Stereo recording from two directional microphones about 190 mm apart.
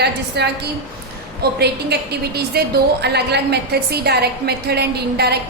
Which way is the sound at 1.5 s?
60° right (ahead or behind).